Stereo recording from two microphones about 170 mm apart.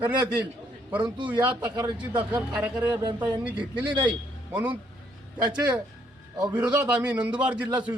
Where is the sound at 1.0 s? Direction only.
30° right (ahead or behind).